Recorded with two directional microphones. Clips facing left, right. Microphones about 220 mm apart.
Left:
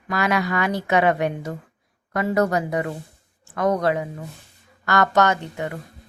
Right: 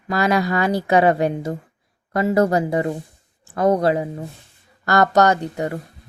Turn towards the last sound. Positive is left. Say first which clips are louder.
# right 4 dB
turn(degrees=-35)  # may be behind; listen again after turning